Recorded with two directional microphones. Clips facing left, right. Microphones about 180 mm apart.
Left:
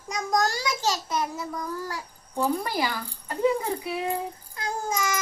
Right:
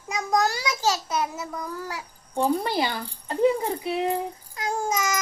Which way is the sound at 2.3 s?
25° right (ahead or behind).